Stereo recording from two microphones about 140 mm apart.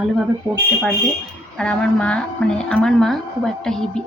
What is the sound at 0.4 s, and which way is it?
Speech, 25° right (ahead or behind).